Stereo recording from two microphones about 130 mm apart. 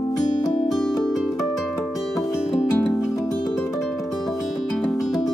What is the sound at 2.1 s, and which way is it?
Music, 25° left (ahead or behind).